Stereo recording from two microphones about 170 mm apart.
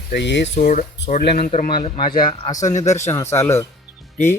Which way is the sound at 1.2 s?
60° left (ahead or behind).